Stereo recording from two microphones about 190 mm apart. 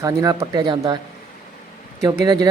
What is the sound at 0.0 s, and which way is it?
Speech, 15° right (ahead or behind).